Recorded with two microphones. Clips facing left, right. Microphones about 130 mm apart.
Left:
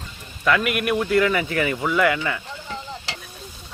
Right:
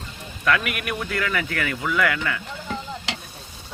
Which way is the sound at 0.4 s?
5° left (ahead or behind).